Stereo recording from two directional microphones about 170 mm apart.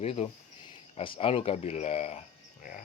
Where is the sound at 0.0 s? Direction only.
35° left (ahead or behind).